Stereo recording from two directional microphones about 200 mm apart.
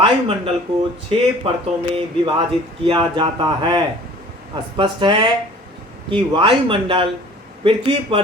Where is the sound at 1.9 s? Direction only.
25° right (ahead or behind).